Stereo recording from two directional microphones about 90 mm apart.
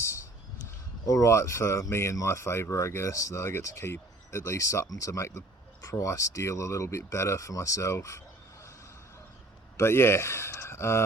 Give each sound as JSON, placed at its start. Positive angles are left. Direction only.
{"t": 1.0, "sound": "speech", "side_deg": 35}
{"t": 9.7, "sound": "speech", "side_deg": 30}